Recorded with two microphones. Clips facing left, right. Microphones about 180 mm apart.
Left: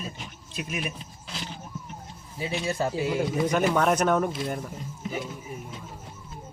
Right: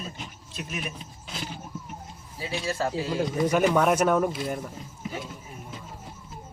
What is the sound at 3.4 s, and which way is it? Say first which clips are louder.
Speech: right 2 dB; 5° right (ahead or behind).